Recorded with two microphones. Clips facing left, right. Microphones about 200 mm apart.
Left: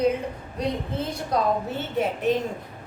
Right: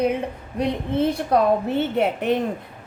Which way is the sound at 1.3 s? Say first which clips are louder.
Right 5 dB; 60° right (ahead or behind).